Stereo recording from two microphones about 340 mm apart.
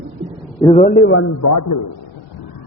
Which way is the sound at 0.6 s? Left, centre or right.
Centre.